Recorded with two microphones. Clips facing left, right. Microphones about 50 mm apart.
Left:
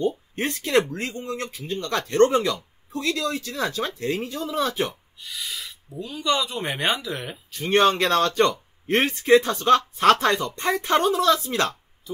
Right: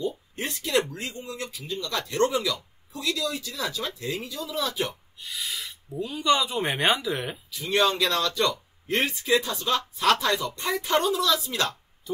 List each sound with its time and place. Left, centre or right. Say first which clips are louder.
0.4 s speech: left 4 dB; left
5.2 s speech: even; centre
7.5 s speech: left 5 dB; left